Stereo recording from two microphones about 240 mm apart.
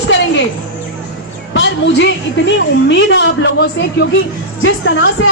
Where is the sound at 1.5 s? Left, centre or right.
Left.